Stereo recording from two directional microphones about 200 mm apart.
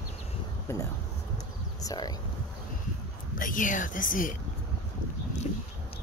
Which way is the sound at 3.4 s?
40° left (ahead or behind).